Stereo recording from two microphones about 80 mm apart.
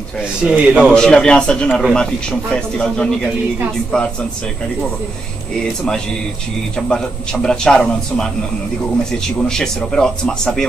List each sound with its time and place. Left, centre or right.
0.4 s a man's voice: centre
0.9 s a man's voice: centre
6.9 s a man's voice: centre